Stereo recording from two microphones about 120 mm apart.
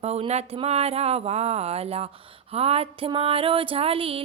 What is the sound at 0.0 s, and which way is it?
Speech, 60° right (ahead or behind).